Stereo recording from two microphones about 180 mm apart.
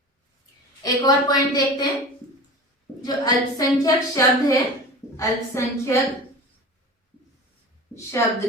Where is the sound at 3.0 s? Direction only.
20° left (ahead or behind).